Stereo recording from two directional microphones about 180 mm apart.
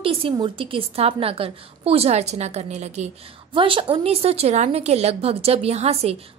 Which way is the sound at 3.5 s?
30° right (ahead or behind).